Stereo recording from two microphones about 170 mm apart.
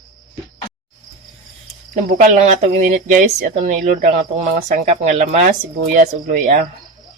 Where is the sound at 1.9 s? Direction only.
50° right (ahead or behind).